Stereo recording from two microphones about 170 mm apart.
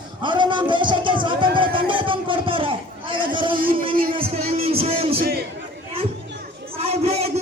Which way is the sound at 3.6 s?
55° right (ahead or behind).